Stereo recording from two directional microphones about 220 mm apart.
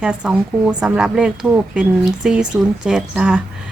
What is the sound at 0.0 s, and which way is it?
A woman's voice, 5° right (ahead or behind).